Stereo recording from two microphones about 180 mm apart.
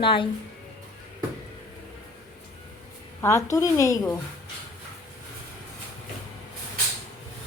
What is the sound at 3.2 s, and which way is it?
A woman's voice, 15° left (ahead or behind).